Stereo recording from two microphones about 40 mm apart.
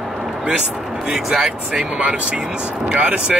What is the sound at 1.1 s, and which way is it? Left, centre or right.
Speech, right.